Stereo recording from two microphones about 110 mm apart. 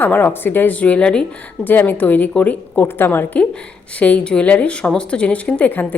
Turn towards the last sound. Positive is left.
turn(degrees=15)  # may be behind; listen again after turning